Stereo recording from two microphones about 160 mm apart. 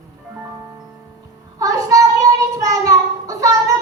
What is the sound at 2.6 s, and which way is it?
Child singing, 20° right (ahead or behind).